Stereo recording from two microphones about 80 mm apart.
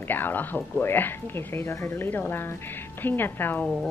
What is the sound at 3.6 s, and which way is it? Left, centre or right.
Speech, centre.